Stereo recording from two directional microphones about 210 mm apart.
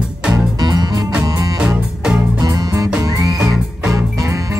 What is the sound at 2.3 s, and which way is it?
Music, 15° right (ahead or behind).